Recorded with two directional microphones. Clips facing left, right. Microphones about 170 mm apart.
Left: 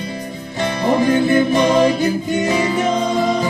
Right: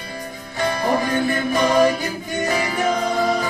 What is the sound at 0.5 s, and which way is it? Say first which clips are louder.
Music: left 3 dB; 25° left (ahead or behind).